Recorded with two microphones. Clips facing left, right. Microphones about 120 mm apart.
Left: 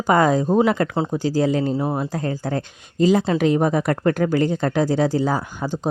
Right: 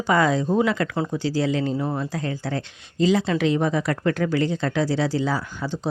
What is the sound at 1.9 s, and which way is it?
Speech, 45° left (ahead or behind).